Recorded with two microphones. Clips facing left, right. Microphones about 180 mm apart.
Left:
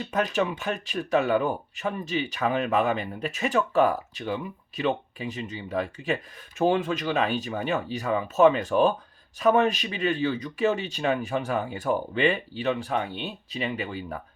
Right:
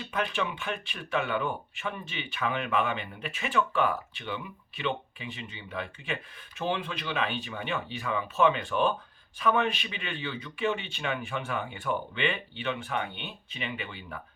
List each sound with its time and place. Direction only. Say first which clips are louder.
0.0 s speech: left 6 dB; 40° left (ahead or behind)